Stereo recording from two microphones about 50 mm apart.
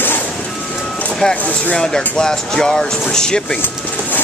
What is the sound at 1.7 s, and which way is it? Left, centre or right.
Speech, centre.